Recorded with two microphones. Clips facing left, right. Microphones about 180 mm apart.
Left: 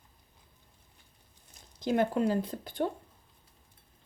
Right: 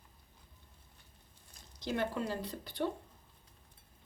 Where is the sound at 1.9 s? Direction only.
50° left (ahead or behind).